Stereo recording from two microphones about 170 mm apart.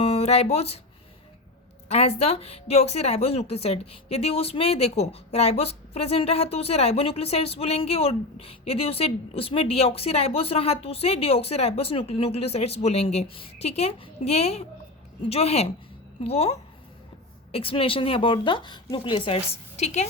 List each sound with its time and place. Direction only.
0.0 s speech: 35° left (ahead or behind)
1.9 s a woman's voice: 40° left (ahead or behind)